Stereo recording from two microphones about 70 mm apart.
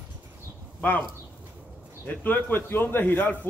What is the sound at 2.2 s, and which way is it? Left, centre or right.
A man's voice, left.